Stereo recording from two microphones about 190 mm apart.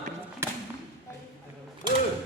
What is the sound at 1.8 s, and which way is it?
Speech, 25° right (ahead or behind).